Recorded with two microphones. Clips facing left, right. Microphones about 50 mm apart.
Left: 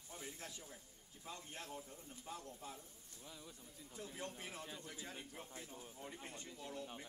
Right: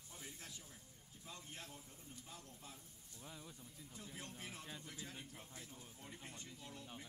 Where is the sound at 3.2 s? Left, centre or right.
Centre.